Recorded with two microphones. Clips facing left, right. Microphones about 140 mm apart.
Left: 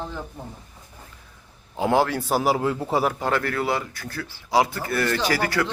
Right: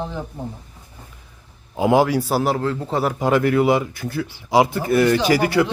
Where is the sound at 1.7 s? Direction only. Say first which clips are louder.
Right 5 dB; 10° right (ahead or behind).